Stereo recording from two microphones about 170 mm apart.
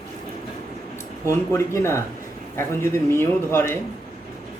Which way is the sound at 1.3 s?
15° left (ahead or behind).